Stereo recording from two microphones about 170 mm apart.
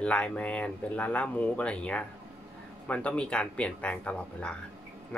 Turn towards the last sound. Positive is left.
turn(degrees=5)  # may be behind; listen again after turning